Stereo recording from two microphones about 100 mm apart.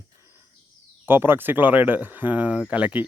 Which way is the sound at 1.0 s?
20° right (ahead or behind).